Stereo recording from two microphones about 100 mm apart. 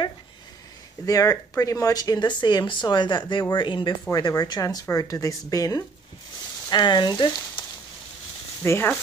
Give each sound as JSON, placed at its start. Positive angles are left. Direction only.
{"t": 1.0, "sound": "speech", "side_deg": 35}
{"t": 4.1, "sound": "a woman's voice", "side_deg": 35}
{"t": 6.7, "sound": "speech", "side_deg": 45}
{"t": 8.6, "sound": "speech", "side_deg": 20}